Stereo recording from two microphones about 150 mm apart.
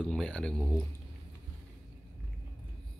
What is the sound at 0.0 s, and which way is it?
Speech, 5° left (ahead or behind).